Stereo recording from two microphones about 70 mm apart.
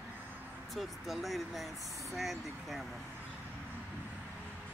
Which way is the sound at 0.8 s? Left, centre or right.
Centre.